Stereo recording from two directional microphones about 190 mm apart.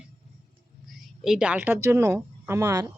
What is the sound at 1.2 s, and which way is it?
Speech, 5° right (ahead or behind).